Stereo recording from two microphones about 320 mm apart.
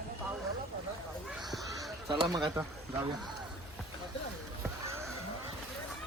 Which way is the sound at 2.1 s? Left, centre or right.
Centre.